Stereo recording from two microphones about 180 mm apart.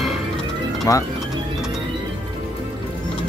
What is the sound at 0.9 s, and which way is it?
Speech, 20° left (ahead or behind).